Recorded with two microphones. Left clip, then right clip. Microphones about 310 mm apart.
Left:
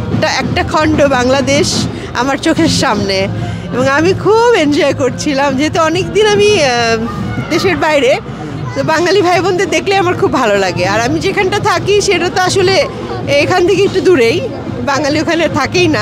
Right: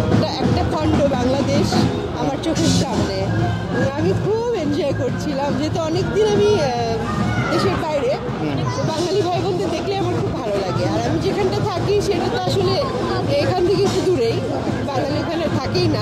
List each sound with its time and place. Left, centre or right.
0.2 s speech: left